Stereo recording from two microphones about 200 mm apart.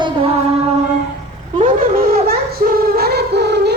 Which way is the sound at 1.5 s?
40° right (ahead or behind).